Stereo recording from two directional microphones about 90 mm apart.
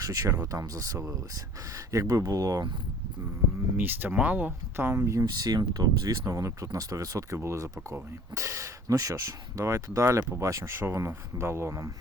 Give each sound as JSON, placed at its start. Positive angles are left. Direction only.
{"t": 0.0, "sound": "speech", "side_deg": -45}
{"t": 3.8, "sound": "speech", "side_deg": -20}
{"t": 5.3, "sound": "speech", "side_deg": -50}